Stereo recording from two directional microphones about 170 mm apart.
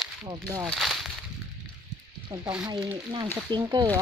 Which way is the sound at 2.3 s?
25° right (ahead or behind).